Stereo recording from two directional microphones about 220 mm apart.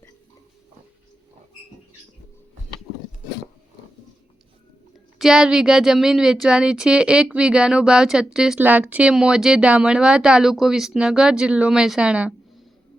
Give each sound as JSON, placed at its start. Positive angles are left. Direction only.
{"t": 5.2, "sound": "a woman's voice", "side_deg": -5}